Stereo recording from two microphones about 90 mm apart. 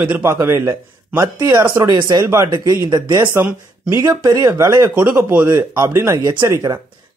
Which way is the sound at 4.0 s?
40° right (ahead or behind).